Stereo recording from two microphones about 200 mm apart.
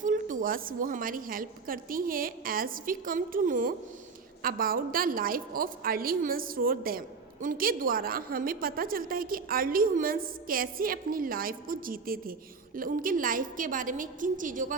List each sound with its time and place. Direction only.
0.0 s a woman's voice: 40° right (ahead or behind)